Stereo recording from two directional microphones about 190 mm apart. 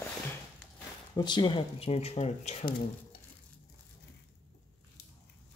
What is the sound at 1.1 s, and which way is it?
Speech, 25° left (ahead or behind).